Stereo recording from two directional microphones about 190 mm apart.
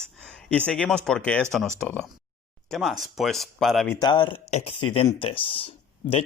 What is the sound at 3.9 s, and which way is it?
Speech, 20° left (ahead or behind).